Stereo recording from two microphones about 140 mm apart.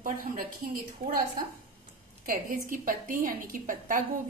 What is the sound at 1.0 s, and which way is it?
Speech, 90° right.